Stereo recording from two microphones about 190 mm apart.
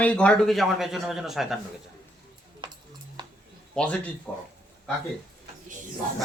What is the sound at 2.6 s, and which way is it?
Music, 25° right (ahead or behind).